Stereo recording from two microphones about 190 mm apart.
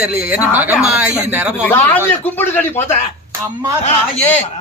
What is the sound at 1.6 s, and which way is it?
A man's voice, 10° left (ahead or behind).